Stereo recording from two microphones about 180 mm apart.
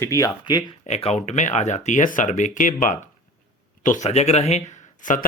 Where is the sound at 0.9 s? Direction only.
35° left (ahead or behind).